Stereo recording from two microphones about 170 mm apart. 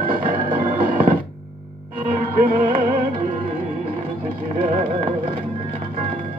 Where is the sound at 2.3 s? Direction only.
55° right (ahead or behind).